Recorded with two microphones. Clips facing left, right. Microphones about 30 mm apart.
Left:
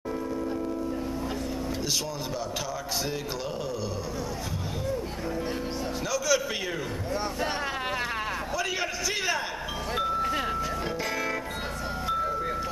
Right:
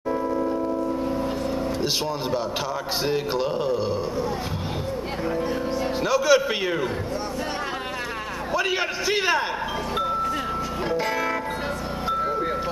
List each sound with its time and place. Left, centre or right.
6.0 s a man's voice: right
8.5 s a man's voice: right